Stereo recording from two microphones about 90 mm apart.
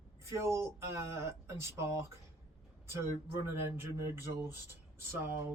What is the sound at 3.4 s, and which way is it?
Speech, 30° right (ahead or behind).